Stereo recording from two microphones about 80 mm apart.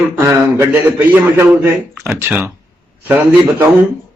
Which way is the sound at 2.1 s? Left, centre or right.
Right.